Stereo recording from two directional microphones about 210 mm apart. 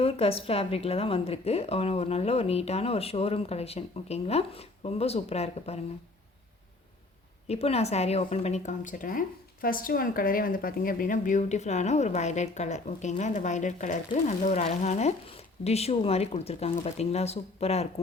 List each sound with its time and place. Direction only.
0.0 s a woman's voice: 30° left (ahead or behind)
7.4 s a woman's voice: 30° left (ahead or behind)